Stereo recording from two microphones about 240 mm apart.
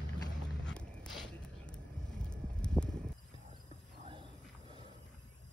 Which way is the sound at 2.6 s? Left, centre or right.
Centre.